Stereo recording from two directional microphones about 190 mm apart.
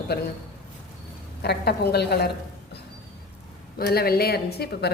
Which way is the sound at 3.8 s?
55° left (ahead or behind).